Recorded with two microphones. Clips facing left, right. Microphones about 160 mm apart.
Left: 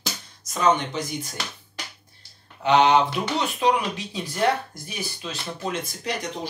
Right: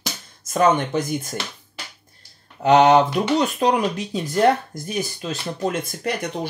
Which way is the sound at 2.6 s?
45° right (ahead or behind).